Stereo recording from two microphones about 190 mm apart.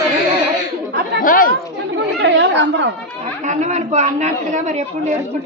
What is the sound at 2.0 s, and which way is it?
Chatter, 70° right (ahead or behind).